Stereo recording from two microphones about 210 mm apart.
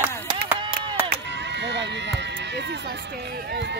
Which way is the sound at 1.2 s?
55° right (ahead or behind).